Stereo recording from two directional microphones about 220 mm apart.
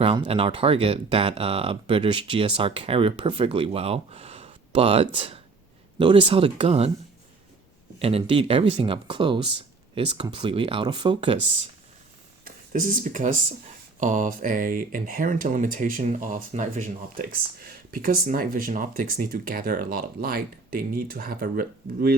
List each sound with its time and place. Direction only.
0.0 s speech: 20° right (ahead or behind)
7.9 s speech: 25° right (ahead or behind)
12.5 s speech: 40° right (ahead or behind)